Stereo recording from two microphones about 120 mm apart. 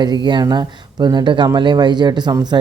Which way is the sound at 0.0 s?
40° right (ahead or behind).